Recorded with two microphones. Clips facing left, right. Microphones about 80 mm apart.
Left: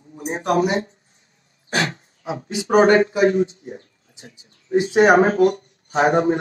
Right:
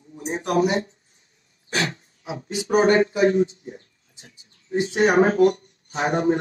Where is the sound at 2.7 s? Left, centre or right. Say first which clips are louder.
Left 3 dB; left.